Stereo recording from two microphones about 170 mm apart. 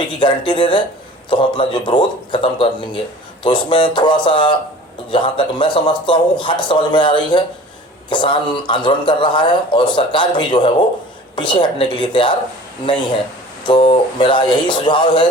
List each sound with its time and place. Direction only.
0.2 s a man's voice: 25° left (ahead or behind)
13.7 s a man's voice: 30° left (ahead or behind)